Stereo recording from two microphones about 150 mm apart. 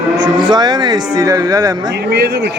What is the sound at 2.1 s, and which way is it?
Speech, 90° right.